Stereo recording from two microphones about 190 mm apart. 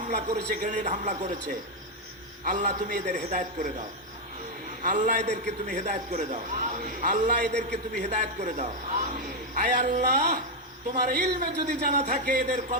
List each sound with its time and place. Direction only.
0.1 s a man's voice: 35° right (ahead or behind)
2.4 s a man's voice: 40° right (ahead or behind)
4.8 s a man's voice: 45° right (ahead or behind)